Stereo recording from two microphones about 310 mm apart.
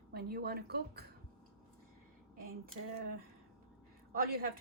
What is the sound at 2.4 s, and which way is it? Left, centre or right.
Speech, right.